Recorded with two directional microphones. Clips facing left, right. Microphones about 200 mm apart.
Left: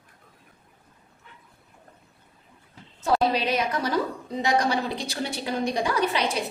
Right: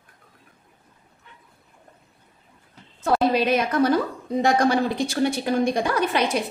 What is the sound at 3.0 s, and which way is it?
A woman's voice, 55° right (ahead or behind).